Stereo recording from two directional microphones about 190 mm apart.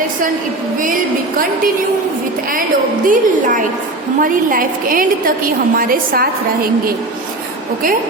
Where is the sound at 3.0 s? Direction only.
45° right (ahead or behind).